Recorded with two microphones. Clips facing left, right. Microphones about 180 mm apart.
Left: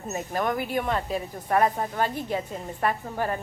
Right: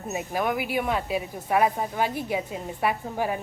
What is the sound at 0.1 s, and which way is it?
Speech, 10° right (ahead or behind).